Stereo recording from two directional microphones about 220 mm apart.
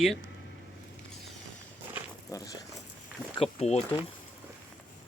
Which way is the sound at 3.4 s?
30° left (ahead or behind).